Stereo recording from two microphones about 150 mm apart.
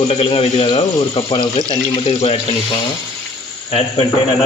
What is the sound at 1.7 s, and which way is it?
Speech, 40° left (ahead or behind).